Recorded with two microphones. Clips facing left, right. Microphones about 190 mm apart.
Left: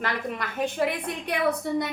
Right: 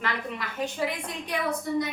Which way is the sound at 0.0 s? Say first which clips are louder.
Left 2 dB; 55° left (ahead or behind).